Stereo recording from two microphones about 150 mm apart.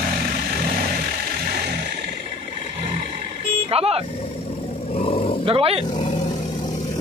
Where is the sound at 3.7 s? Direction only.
40° right (ahead or behind).